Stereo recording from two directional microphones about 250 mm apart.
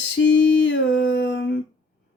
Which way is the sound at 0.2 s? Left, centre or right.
Left.